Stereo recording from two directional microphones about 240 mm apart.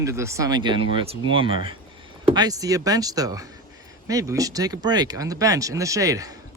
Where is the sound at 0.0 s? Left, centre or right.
Centre.